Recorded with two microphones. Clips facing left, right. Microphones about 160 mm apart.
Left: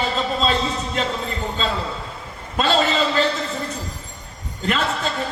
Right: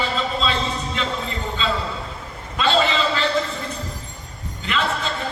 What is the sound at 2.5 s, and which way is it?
Speech, 45° left (ahead or behind).